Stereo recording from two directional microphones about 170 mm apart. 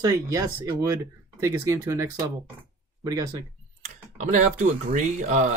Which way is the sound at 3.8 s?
50° right (ahead or behind).